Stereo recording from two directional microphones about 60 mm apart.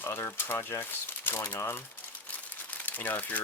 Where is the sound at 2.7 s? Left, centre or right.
Left.